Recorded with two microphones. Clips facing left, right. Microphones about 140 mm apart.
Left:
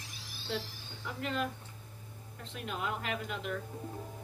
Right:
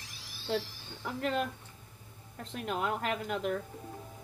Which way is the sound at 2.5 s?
45° right (ahead or behind).